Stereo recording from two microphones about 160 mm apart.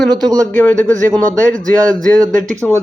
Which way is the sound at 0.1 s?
25° right (ahead or behind).